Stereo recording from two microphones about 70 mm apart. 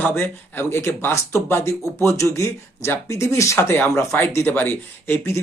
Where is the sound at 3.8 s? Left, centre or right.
Left.